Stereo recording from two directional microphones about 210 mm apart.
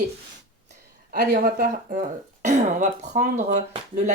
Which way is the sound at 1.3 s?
40° right (ahead or behind).